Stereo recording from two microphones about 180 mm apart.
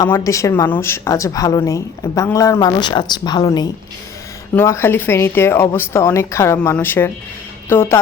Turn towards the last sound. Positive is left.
turn(degrees=10)  # may be behind; listen again after turning